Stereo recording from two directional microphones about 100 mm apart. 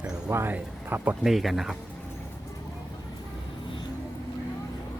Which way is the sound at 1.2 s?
Centre (ahead or behind).